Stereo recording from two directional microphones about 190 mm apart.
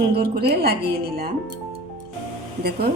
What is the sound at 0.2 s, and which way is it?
Speech, 55° right (ahead or behind).